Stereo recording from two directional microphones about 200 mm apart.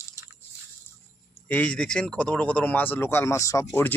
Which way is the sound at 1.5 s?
5° left (ahead or behind).